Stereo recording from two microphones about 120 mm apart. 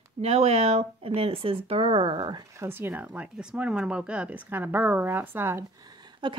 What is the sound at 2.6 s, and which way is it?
Speech, 20° right (ahead or behind).